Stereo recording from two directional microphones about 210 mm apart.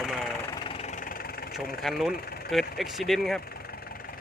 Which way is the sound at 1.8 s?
Centre (ahead or behind).